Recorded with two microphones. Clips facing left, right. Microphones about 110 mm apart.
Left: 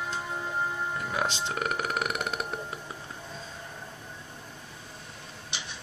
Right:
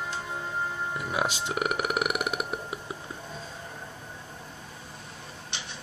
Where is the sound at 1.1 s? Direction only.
10° right (ahead or behind).